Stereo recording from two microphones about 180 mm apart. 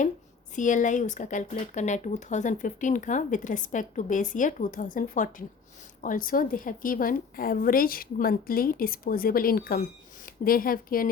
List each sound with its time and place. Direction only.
0.5 s speech: 45° left (ahead or behind)